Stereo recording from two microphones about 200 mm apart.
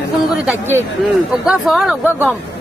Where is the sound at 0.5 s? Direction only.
10° right (ahead or behind).